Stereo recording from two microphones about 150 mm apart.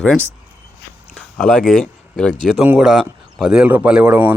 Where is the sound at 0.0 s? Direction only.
5° left (ahead or behind).